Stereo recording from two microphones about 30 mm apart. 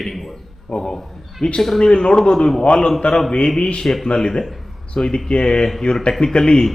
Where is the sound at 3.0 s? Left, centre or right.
Left.